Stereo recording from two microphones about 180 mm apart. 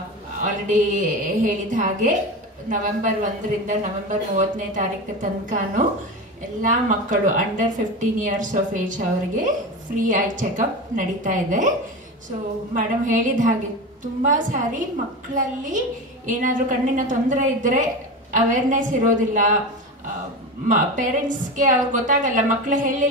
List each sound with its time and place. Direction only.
0.4 s a woman's voice: 45° right (ahead or behind)
20.6 s a woman's voice: 45° right (ahead or behind)